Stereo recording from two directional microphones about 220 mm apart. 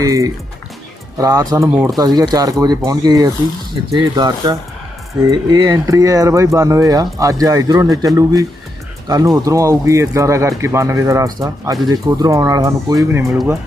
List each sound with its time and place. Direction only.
0.0 s speech: 15° right (ahead or behind)